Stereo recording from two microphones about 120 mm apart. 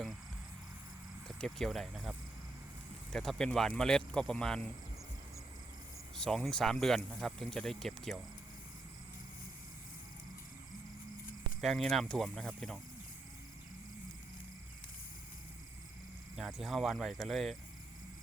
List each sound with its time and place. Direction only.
1.3 s speech: centre (ahead or behind)
6.1 s speech: 5° left (ahead or behind)
11.6 s speech: 5° left (ahead or behind)
16.3 s speech: centre (ahead or behind)